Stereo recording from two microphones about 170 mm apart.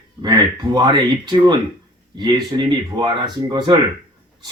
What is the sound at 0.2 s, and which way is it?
Speech, 25° right (ahead or behind).